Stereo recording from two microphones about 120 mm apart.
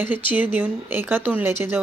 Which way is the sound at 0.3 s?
15° right (ahead or behind).